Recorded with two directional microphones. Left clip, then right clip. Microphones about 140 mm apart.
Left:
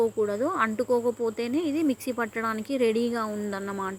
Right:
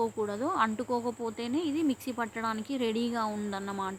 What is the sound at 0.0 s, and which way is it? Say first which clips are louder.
A woman's voice: left 6 dB; 15° left (ahead or behind).